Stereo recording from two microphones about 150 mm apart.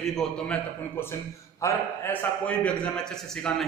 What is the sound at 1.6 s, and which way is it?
Speech, 20° left (ahead or behind).